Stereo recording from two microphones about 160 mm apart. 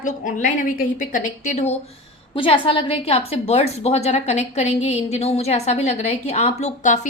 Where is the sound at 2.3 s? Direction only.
35° left (ahead or behind).